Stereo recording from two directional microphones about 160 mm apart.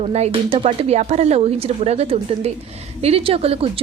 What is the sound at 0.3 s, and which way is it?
Speech, 40° right (ahead or behind).